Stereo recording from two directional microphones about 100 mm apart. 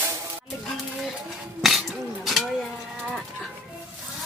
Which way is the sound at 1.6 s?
Centre (ahead or behind).